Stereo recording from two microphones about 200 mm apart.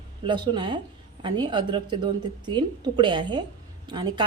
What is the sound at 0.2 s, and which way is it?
A woman's voice, 25° right (ahead or behind).